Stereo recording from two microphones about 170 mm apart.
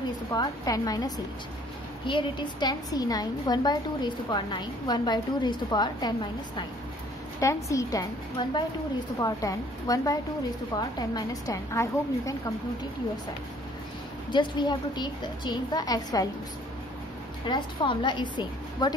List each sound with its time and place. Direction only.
0.3 s a woman's voice: 20° left (ahead or behind)
14.3 s a woman's voice: 30° left (ahead or behind)
17.5 s a woman's voice: 25° left (ahead or behind)